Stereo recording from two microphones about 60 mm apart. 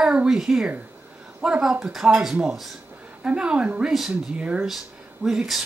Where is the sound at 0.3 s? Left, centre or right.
Centre.